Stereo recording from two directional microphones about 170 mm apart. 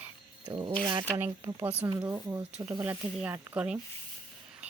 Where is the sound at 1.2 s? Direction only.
15° right (ahead or behind).